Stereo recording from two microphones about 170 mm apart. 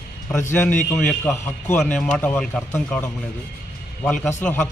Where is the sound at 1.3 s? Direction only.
15° left (ahead or behind).